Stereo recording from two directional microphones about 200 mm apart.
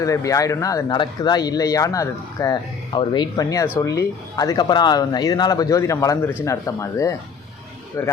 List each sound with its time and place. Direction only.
0.0 s speech: 15° left (ahead or behind)